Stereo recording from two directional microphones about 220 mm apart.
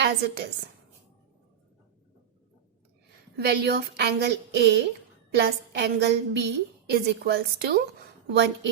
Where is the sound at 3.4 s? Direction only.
50° right (ahead or behind).